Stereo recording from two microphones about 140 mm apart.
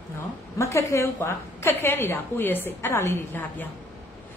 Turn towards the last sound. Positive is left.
turn(degrees=15)  # may be behind; listen again after turning